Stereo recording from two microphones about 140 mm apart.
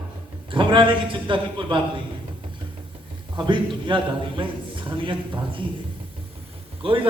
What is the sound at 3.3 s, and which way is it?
A man's voice, 35° right (ahead or behind).